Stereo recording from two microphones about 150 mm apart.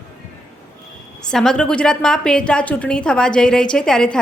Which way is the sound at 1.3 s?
5° left (ahead or behind).